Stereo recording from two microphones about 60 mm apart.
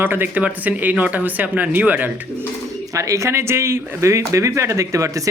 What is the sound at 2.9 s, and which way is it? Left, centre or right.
Speech, right.